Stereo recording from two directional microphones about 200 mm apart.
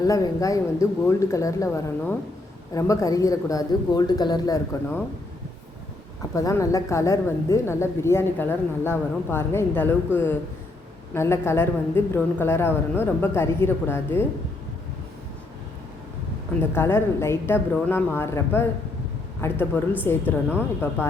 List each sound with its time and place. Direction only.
0.0 s a woman's voice: 15° left (ahead or behind)
6.3 s a woman's voice: 15° left (ahead or behind)
16.6 s a woman's voice: 10° left (ahead or behind)